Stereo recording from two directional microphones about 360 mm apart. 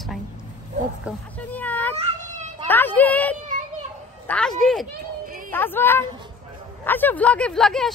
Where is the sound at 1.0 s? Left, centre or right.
Centre.